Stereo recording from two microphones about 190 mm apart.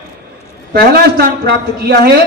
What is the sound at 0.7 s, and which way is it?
Speech, 55° right (ahead or behind).